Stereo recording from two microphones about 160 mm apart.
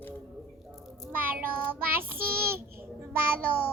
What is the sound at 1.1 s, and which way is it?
Child singing, 10° right (ahead or behind).